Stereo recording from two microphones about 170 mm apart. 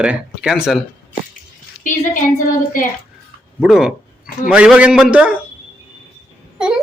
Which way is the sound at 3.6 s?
5° right (ahead or behind).